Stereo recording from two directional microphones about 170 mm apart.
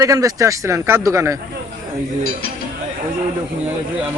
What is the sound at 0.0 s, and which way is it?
Speech, 20° right (ahead or behind).